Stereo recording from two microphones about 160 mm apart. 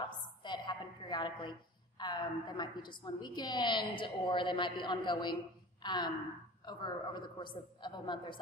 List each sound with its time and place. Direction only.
0.4 s a woman's voice: 30° left (ahead or behind)